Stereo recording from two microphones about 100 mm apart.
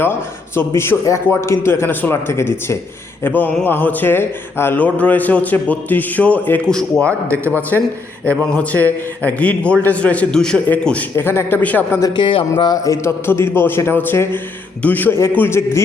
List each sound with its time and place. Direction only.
0.0 s a man's voice: 25° left (ahead or behind); by 7.1 s 5° left (ahead or behind)
8.4 s speech: 15° left (ahead or behind)
12.1 s speech: 60° left (ahead or behind)
12.7 s a man's voice: 30° left (ahead or behind)